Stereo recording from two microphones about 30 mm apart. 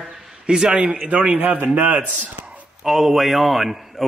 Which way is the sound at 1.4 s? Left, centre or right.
Right.